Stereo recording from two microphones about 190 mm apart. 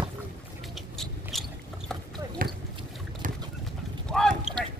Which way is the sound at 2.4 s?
50° right (ahead or behind).